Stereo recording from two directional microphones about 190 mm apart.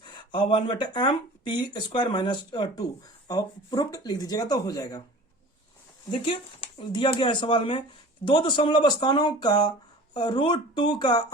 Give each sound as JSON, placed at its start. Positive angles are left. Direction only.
{"t": 0.0, "sound": "speech", "side_deg": 25}
{"t": 6.1, "sound": "speech", "side_deg": 25}